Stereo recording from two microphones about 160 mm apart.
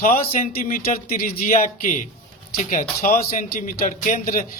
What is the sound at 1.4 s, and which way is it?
A man's voice, 50° left (ahead or behind).